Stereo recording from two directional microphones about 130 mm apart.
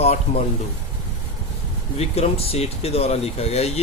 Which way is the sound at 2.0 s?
50° left (ahead or behind).